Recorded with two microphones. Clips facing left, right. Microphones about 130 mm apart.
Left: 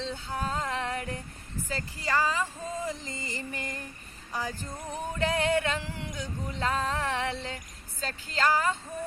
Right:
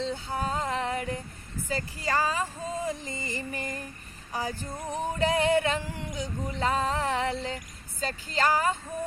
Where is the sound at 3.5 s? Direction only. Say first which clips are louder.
Right 3 dB; 45° right (ahead or behind).